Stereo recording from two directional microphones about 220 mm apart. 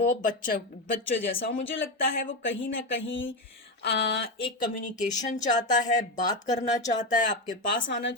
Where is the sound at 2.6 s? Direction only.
60° left (ahead or behind).